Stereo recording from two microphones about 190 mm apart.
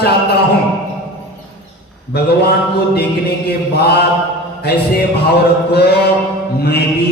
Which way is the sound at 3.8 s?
55° left (ahead or behind).